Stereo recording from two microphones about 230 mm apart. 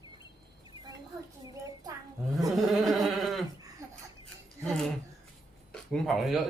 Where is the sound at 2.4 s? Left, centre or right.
Centre.